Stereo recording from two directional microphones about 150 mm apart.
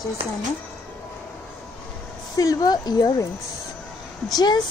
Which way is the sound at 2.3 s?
25° left (ahead or behind).